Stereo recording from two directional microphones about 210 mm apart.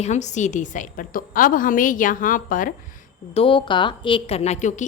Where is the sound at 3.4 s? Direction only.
25° left (ahead or behind).